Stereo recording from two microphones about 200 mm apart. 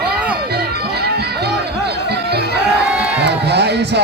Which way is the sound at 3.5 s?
55° right (ahead or behind).